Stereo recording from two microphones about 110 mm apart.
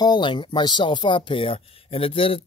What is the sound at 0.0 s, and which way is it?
Speech, 45° left (ahead or behind).